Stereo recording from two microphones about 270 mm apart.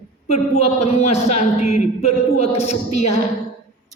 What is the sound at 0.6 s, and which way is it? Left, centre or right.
Speech, left.